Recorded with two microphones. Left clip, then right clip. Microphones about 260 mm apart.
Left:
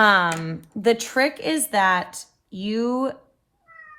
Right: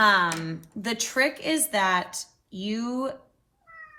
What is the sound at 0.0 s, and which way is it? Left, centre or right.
Speech, left.